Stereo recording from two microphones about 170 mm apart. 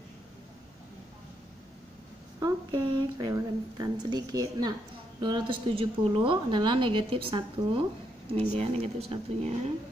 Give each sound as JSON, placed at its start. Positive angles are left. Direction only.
{"t": 2.4, "sound": "a woman's voice", "side_deg": -25}